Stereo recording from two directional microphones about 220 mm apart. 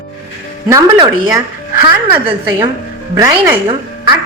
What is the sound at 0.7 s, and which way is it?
A woman's voice, 15° right (ahead or behind).